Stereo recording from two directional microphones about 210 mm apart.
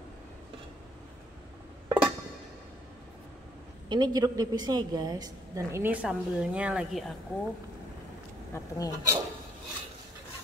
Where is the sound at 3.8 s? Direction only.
20° right (ahead or behind).